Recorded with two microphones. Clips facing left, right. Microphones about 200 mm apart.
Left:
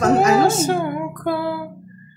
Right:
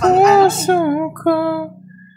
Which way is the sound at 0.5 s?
60° right (ahead or behind).